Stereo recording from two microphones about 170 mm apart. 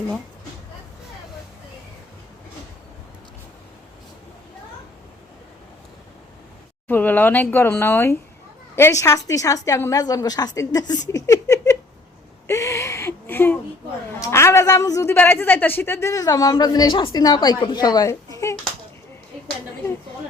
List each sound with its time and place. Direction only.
6.8 s a woman's voice: 10° left (ahead or behind)
12.5 s a sound: 15° left (ahead or behind)
14.2 s a woman's voice: 15° left (ahead or behind)